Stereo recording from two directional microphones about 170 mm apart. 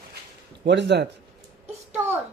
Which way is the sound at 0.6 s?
85° right.